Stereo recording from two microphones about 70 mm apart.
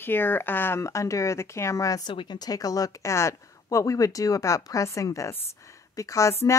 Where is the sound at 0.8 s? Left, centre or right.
Left.